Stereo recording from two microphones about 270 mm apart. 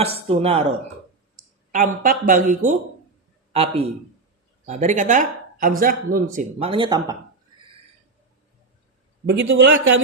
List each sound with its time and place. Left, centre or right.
0.0 s speech: right
9.2 s a man's voice: right